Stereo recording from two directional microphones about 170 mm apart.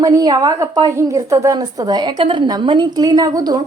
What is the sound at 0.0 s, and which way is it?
A woman's voice, 20° right (ahead or behind).